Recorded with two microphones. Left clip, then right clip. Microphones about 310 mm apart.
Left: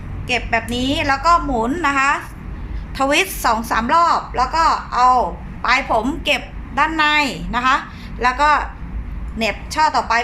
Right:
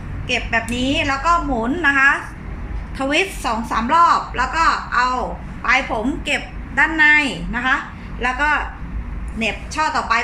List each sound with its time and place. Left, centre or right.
0.3 s a woman's voice: centre